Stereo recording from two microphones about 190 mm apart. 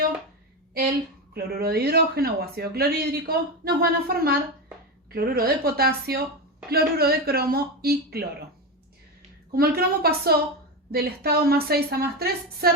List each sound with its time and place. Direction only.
0.7 s a woman's voice: 55° right (ahead or behind)
9.5 s a woman's voice: 50° right (ahead or behind)